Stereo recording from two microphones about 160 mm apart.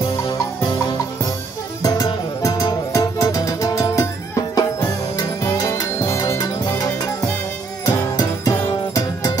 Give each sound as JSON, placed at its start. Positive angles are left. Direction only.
{"t": 0.2, "sound": "music", "side_deg": 30}
{"t": 1.8, "sound": "music", "side_deg": 20}